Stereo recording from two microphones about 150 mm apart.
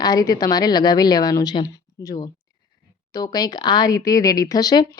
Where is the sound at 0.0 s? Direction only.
25° left (ahead or behind).